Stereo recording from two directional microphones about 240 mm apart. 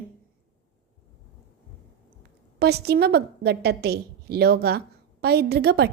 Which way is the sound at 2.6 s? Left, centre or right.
Right.